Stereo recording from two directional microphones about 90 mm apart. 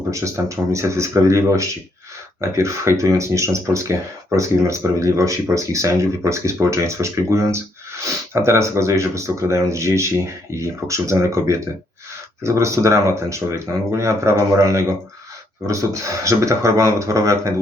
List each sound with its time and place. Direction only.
0.1 s speech: 35° right (ahead or behind)